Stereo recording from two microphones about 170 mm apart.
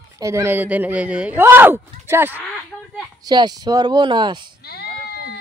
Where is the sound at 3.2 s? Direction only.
25° right (ahead or behind).